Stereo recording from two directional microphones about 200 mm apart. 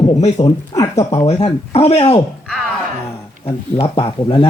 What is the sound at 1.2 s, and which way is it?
Speech, 30° left (ahead or behind).